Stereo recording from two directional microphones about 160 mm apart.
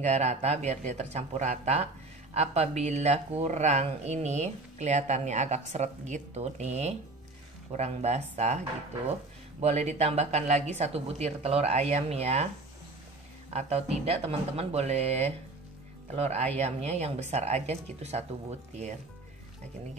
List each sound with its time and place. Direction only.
0.0 s speech: 45° right (ahead or behind)
9.6 s speech: 45° right (ahead or behind)
13.5 s speech: 40° right (ahead or behind)